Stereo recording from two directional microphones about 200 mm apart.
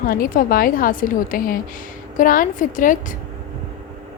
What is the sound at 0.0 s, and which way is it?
A woman's voice, 45° left (ahead or behind).